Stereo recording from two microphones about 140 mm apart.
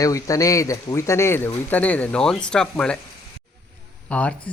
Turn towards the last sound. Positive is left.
turn(degrees=10)  # may be behind; listen again after turning